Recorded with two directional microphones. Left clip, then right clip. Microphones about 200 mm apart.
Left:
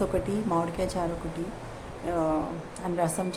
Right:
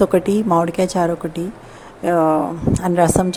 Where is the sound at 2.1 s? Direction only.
40° right (ahead or behind).